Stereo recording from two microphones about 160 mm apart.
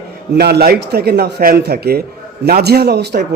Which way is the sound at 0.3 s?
85° right.